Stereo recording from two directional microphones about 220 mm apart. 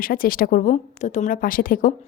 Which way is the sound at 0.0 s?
40° left (ahead or behind).